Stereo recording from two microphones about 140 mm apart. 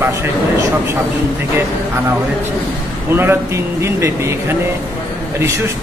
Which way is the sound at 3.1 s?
15° right (ahead or behind).